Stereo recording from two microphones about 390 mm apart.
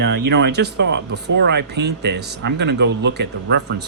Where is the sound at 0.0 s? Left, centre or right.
Right.